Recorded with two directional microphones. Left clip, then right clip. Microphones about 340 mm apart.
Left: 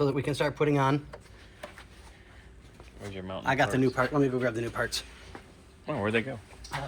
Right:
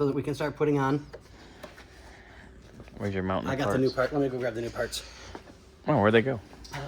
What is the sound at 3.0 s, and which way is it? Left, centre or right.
Speech, right.